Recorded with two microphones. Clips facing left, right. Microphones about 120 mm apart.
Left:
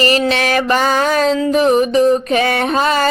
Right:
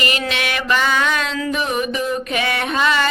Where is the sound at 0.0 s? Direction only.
35° left (ahead or behind).